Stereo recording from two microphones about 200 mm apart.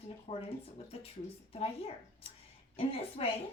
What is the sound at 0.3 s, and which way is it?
Speech, 30° left (ahead or behind).